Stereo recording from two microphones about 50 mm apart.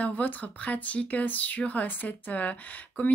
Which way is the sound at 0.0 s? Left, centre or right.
Left.